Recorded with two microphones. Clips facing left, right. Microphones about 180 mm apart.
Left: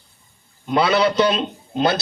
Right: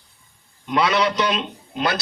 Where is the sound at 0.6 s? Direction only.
30° left (ahead or behind).